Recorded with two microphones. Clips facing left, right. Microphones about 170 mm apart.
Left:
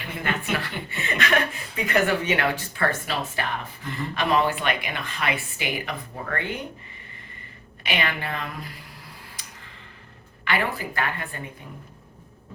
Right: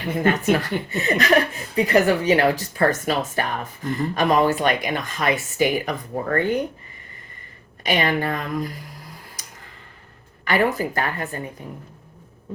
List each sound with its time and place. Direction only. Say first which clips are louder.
0.1 s speech: right 9 dB; 40° right (ahead or behind)
7.9 s speech: right 7 dB; 40° right (ahead or behind)
9.4 s a sound: right 1 dB; 45° right (ahead or behind)
10.4 s speech: right 6 dB; 40° right (ahead or behind)